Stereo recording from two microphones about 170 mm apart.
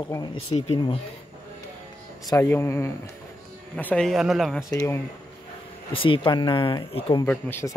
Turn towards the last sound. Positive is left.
turn(degrees=10)  # may be behind; listen again after turning